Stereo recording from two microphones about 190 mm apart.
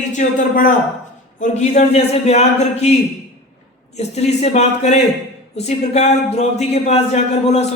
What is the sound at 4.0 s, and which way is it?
Speech, 35° left (ahead or behind).